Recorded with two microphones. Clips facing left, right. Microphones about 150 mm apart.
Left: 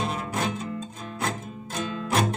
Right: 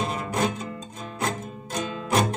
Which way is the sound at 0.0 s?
Centre (ahead or behind).